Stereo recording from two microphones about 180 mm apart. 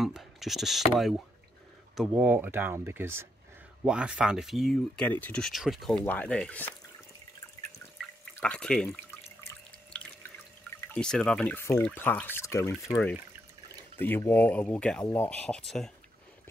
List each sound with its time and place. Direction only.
0.0 s speech: centre (ahead or behind)
8.0 s drip: 5° left (ahead or behind)
10.7 s water: 15° left (ahead or behind)
11.0 s speech: 5° left (ahead or behind)